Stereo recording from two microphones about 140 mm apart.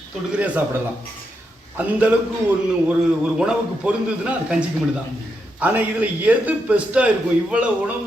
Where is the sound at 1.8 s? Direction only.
10° right (ahead or behind).